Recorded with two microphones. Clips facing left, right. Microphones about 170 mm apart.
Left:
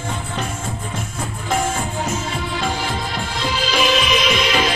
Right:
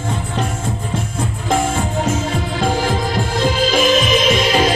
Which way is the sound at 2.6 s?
45° right (ahead or behind).